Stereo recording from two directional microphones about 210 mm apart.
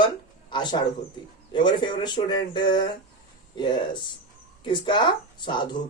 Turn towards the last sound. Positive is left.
turn(degrees=20)  # may be behind; listen again after turning